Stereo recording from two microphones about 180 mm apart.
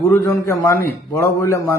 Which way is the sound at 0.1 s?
15° left (ahead or behind).